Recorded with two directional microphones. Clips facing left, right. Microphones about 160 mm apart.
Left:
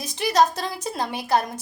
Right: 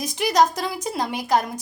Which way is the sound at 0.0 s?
15° right (ahead or behind).